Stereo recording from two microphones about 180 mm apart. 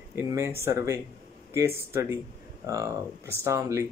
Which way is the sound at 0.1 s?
15° right (ahead or behind).